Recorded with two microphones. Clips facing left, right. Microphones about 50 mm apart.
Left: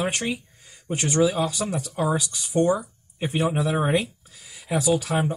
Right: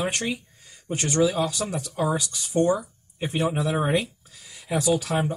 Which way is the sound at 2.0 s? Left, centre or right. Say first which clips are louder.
Left 1 dB; left.